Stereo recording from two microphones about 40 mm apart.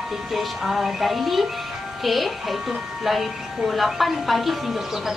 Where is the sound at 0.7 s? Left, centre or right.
Centre.